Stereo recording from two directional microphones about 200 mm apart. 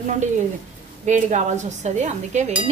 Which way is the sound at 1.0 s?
35° right (ahead or behind).